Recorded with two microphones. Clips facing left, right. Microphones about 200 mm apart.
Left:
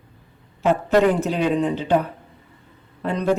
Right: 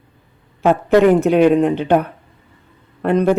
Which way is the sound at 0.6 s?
60° right (ahead or behind).